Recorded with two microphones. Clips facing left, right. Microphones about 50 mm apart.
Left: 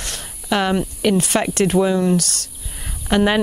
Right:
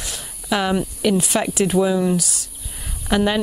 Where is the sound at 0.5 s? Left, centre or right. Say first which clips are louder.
Left 1 dB; centre.